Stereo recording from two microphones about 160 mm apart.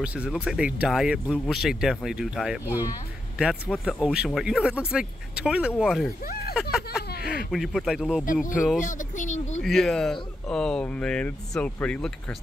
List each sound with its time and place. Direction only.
0.0 s speech: 5° right (ahead or behind)
6.2 s speech: 75° left (ahead or behind)
7.0 s a sound: 80° left
7.5 s speech: centre (ahead or behind)
8.7 s speech: 55° left (ahead or behind)
9.6 s speech: centre (ahead or behind)